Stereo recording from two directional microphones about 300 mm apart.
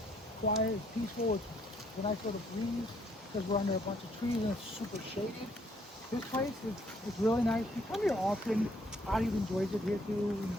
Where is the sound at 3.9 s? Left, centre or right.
Centre.